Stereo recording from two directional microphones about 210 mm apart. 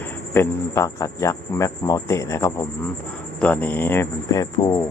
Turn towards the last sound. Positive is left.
turn(degrees=15)  # may be behind; listen again after turning